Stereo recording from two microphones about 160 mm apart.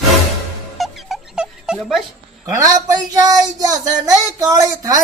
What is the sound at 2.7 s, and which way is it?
Child singing, 25° right (ahead or behind).